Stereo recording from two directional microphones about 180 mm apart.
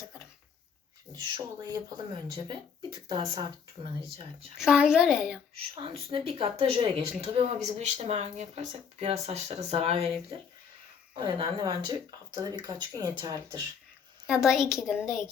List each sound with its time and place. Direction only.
1.1 s speech: 20° right (ahead or behind)
4.5 s a woman's voice: 5° right (ahead or behind)
5.8 s speech: 30° right (ahead or behind)
11.1 s speech: 30° right (ahead or behind)
14.3 s a woman's voice: 5° right (ahead or behind)